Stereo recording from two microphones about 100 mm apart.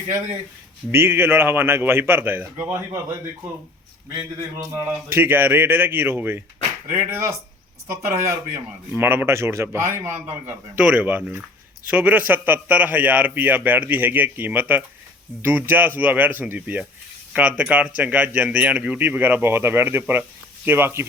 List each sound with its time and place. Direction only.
0.9 s a man's voice: 25° right (ahead or behind)
7.9 s a man's voice: 30° right (ahead or behind)
10.8 s a man's voice: 15° right (ahead or behind)